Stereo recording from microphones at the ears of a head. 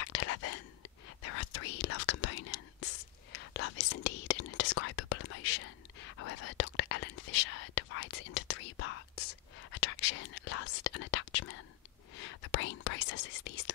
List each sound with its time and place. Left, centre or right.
0.0 s whispering: left